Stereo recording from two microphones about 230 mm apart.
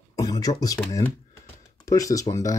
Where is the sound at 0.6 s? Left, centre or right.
Centre.